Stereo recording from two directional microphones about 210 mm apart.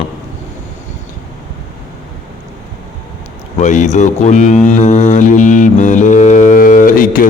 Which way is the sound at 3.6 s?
35° left (ahead or behind).